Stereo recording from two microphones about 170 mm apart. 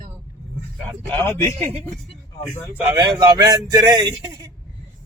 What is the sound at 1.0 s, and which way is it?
Speech, 10° left (ahead or behind).